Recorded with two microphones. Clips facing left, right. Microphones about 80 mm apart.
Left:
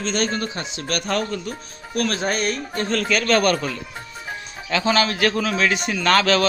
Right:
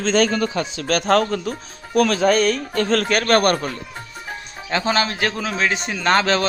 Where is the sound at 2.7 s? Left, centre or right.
Right.